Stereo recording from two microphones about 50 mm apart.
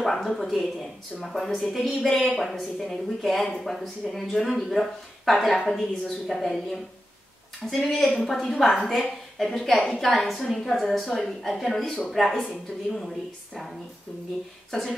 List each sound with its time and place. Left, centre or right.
0.0 s speech: centre
1.9 s a woman's voice: centre